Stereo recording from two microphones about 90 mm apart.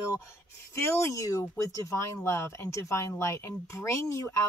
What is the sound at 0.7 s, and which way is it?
Speech, 30° left (ahead or behind).